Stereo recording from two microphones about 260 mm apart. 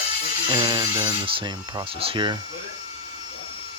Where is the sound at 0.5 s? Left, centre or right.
Centre.